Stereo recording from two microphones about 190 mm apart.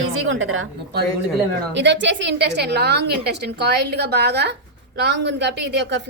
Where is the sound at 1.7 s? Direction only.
70° right (ahead or behind).